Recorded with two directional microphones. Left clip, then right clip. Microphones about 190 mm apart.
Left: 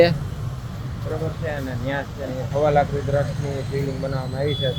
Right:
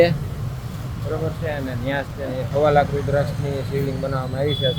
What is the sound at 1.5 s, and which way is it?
Speech, 5° right (ahead or behind).